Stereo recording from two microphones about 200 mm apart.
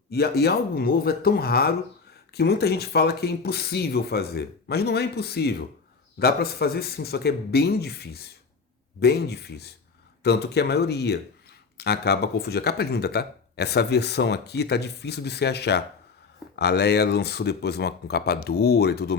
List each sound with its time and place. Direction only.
0.1 s speech: 55° left (ahead or behind)